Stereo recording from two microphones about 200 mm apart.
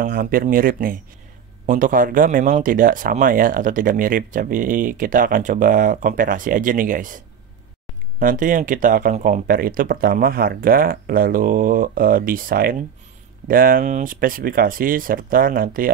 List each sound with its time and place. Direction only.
0.0 s speech: 45° right (ahead or behind)